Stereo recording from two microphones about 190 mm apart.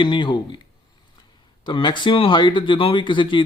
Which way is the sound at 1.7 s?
25° left (ahead or behind).